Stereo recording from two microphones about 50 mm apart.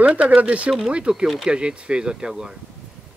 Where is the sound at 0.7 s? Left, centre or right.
Centre.